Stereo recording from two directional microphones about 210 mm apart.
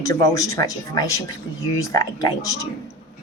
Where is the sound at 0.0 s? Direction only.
15° left (ahead or behind).